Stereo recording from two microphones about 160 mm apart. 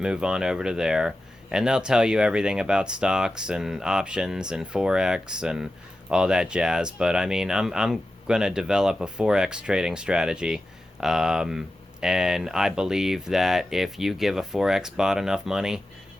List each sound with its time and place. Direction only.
0.0 s speech: 5° right (ahead or behind)